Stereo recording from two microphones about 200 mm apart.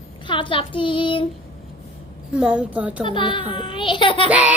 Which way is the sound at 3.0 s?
25° left (ahead or behind).